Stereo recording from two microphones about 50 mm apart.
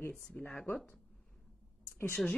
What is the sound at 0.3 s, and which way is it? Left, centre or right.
Speech, left.